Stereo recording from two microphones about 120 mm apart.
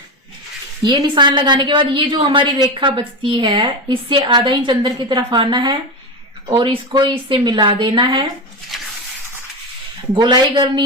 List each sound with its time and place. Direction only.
0.8 s a woman's voice: 35° right (ahead or behind)
8.7 s a sound: centre (ahead or behind)
10.2 s a woman's voice: 40° right (ahead or behind)